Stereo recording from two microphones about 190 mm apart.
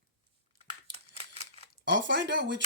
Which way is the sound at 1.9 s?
70° right (ahead or behind).